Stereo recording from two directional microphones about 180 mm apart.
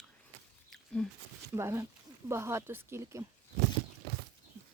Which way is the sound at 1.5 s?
15° right (ahead or behind).